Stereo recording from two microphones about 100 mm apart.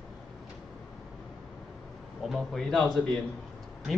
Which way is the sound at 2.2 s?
Centre (ahead or behind).